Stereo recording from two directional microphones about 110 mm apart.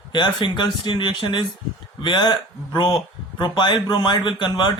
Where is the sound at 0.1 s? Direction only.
45° left (ahead or behind).